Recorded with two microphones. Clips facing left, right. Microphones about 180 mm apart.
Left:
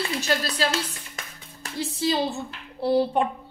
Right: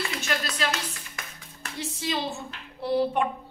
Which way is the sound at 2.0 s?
30° left (ahead or behind).